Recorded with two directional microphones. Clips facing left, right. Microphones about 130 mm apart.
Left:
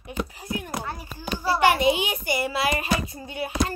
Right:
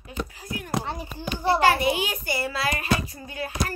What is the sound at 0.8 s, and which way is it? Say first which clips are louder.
Speech: right 2 dB; 25° right (ahead or behind).